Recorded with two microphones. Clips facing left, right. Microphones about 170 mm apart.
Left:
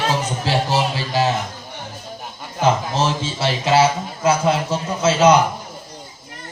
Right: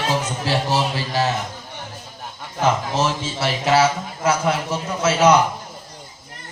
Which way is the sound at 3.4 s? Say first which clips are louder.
Left 1 dB; 25° left (ahead or behind).